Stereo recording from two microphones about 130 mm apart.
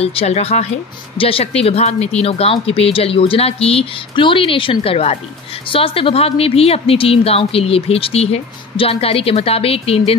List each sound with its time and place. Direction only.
0.0 s a woman's voice: 50° left (ahead or behind)